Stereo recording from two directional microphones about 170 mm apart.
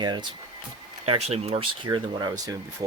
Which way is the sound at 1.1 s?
35° right (ahead or behind).